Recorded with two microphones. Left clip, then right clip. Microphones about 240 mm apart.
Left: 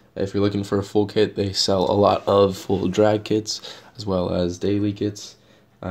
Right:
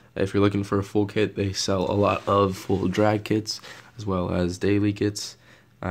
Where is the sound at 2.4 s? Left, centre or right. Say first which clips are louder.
Left 5 dB; right.